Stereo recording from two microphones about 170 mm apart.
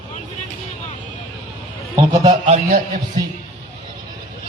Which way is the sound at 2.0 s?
30° right (ahead or behind).